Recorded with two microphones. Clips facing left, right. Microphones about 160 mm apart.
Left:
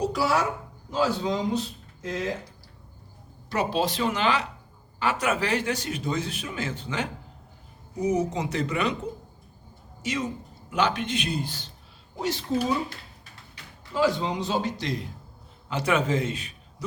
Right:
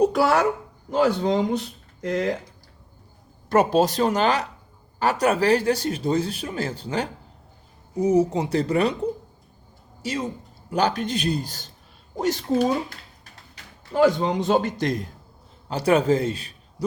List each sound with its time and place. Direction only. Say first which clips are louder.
0.0 s a woman's voice: right 6 dB; 55° right (ahead or behind)
3.5 s speech: right 7 dB; 45° right (ahead or behind)
10.0 s a man's voice: right 1 dB; 35° right (ahead or behind)
13.9 s a man's voice: right 5 dB; 55° right (ahead or behind)
15.7 s a man's voice: right 5 dB; 35° right (ahead or behind)